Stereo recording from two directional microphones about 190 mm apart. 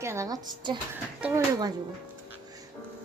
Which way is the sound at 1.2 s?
10° right (ahead or behind).